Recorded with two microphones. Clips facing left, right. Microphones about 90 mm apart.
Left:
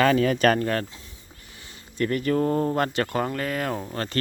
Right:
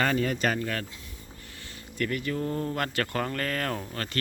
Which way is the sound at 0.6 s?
35° left (ahead or behind).